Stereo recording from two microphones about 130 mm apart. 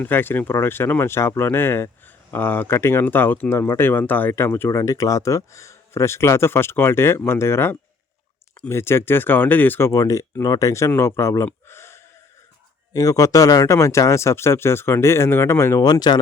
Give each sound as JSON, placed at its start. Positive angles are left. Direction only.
{"t": 0.0, "sound": "speech", "side_deg": 15}